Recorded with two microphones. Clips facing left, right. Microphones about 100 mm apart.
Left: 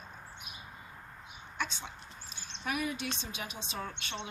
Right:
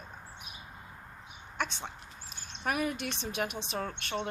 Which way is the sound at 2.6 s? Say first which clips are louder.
Right 3 dB; 50° right (ahead or behind).